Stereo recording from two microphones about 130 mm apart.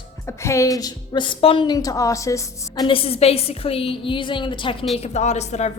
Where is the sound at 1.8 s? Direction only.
25° left (ahead or behind).